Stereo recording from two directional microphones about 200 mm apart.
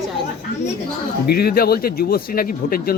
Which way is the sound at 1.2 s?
50° left (ahead or behind).